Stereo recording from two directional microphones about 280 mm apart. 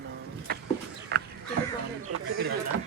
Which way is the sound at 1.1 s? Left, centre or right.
Right.